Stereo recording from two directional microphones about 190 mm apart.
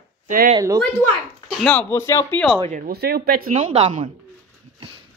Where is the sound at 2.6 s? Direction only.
40° right (ahead or behind).